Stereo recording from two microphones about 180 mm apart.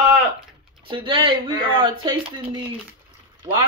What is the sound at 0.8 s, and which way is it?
Speech, 25° right (ahead or behind).